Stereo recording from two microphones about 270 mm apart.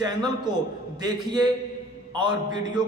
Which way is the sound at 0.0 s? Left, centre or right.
Centre.